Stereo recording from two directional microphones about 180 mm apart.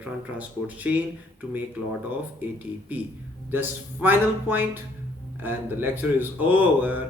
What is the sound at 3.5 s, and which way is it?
A man's voice, 10° right (ahead or behind).